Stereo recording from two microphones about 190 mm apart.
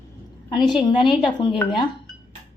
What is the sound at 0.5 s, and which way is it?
A woman's voice, 25° left (ahead or behind).